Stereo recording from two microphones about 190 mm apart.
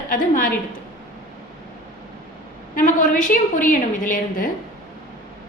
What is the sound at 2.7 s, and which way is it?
A woman's voice, 45° left (ahead or behind).